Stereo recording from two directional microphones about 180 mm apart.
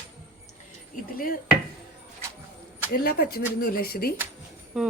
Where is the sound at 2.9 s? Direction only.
60° left (ahead or behind).